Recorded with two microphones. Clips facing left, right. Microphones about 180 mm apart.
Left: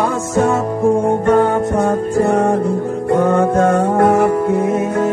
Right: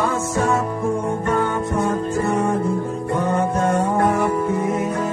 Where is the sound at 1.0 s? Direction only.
70° left (ahead or behind).